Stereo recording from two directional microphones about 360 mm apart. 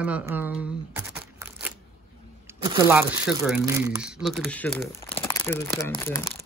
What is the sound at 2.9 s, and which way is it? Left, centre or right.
Speech, centre.